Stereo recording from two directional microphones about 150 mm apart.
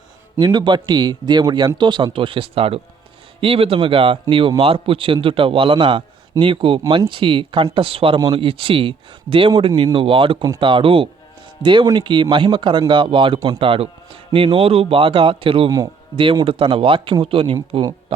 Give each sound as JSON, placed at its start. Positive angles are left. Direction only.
{"t": 0.3, "sound": "a man's voice", "side_deg": -30}